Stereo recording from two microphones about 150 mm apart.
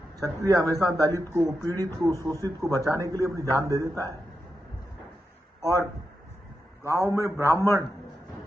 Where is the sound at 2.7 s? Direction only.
20° left (ahead or behind).